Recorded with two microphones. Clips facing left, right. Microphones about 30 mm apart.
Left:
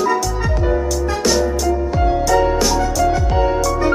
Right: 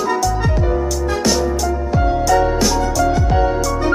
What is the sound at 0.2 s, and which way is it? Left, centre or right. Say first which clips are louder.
Music: right 2 dB; centre.